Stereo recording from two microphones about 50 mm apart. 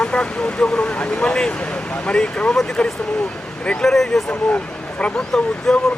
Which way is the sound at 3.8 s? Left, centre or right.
Centre.